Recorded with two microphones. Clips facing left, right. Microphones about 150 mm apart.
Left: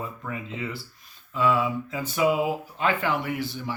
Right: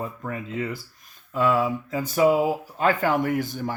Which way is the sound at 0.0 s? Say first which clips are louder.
Right 3 dB; 45° right (ahead or behind).